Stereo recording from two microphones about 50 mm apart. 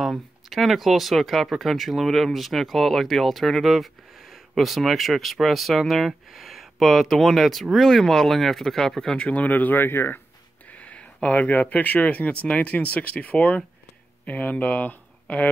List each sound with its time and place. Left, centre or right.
0.5 s speech: centre
9.1 s speech: left
10.7 s speech: left